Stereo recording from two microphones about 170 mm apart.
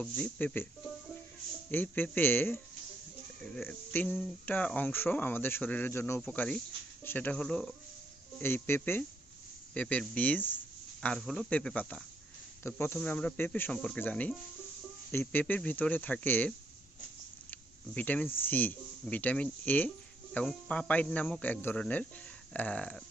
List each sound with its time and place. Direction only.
0.0 s speech: 10° left (ahead or behind)
1.7 s speech: 10° left (ahead or behind)